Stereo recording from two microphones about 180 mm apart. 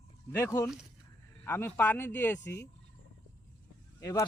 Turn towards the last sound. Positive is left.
turn(degrees=20)  # may be behind; listen again after turning